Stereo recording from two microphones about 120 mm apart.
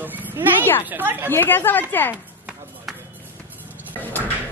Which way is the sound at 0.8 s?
15° right (ahead or behind).